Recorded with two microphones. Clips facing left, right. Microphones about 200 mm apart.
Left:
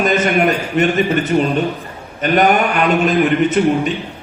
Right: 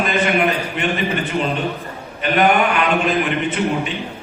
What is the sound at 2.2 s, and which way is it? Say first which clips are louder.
Speech: left 2 dB; 40° left (ahead or behind).